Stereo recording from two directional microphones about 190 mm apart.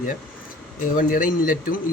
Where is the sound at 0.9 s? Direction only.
45° left (ahead or behind).